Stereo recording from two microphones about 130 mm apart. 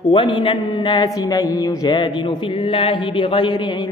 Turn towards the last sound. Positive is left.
turn(degrees=40)  # may be behind; listen again after turning